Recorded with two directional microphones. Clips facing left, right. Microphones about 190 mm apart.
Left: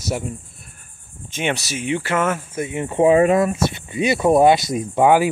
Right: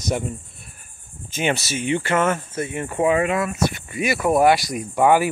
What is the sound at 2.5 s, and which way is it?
Speech, 20° left (ahead or behind).